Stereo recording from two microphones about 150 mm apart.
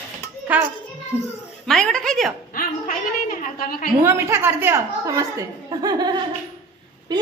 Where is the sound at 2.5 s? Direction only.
65° left (ahead or behind).